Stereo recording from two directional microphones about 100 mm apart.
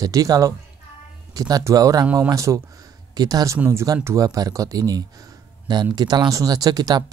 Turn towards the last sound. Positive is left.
turn(degrees=-40)  # may be behind; listen again after turning